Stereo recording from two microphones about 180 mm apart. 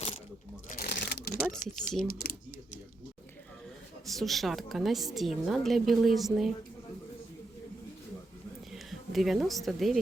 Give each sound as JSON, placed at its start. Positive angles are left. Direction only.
{"t": 0.7, "sound": "shuffling cards", "side_deg": 55}
{"t": 2.0, "sound": "speech", "side_deg": 60}
{"t": 4.0, "sound": "a woman's voice", "side_deg": 0}
{"t": 8.7, "sound": "a woman's voice", "side_deg": 0}